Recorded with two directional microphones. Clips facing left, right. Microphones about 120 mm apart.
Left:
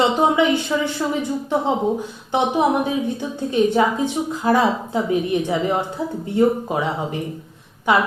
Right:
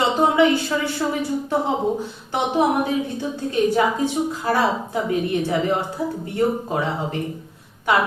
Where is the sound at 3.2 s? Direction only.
20° left (ahead or behind).